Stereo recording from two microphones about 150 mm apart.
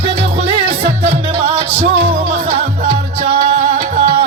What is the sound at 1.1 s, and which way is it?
Music, 45° right (ahead or behind).